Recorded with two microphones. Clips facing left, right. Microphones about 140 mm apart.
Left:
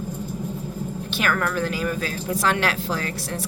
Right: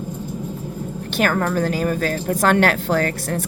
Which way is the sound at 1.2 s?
35° right (ahead or behind).